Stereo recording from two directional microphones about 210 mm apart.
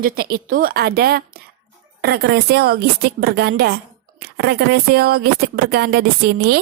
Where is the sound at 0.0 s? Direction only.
45° right (ahead or behind).